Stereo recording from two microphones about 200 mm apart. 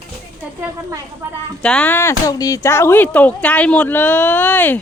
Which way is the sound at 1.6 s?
5° left (ahead or behind).